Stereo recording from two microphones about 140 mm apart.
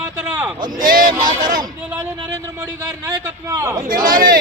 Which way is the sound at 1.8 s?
10° right (ahead or behind).